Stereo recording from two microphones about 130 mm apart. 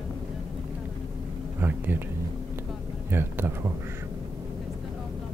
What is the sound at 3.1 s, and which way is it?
Speech, 15° right (ahead or behind).